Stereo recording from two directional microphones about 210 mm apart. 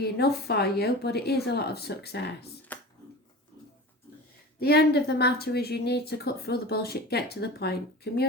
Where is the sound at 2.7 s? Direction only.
5° left (ahead or behind).